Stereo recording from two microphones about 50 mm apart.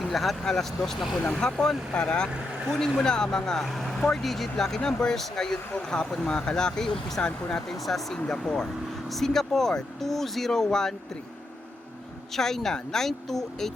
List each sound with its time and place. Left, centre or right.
0.0 s speech: centre
1.3 s speech: centre
7.7 s speech: centre
12.3 s speech: centre